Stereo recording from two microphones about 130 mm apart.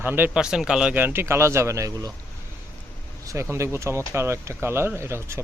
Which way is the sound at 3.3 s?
20° right (ahead or behind).